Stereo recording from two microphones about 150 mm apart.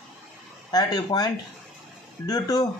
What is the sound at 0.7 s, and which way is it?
Speech, 25° left (ahead or behind).